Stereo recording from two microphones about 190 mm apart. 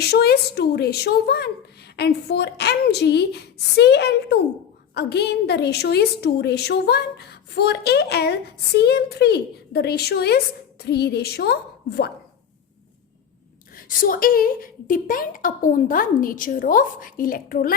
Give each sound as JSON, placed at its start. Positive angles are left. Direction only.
{"t": 0.0, "sound": "a woman's voice", "side_deg": 60}
{"t": 13.7, "sound": "a woman's voice", "side_deg": 45}